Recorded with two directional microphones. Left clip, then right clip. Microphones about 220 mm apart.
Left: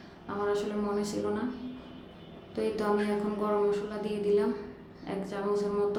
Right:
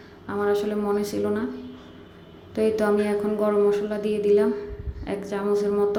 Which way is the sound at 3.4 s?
20° right (ahead or behind).